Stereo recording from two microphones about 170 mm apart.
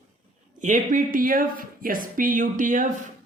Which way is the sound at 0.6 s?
50° right (ahead or behind).